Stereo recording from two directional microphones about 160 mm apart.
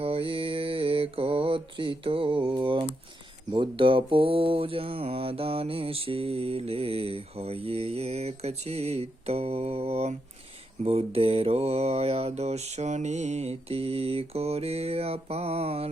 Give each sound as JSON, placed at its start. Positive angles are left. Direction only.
{"t": 0.0, "sound": "mantra", "side_deg": -35}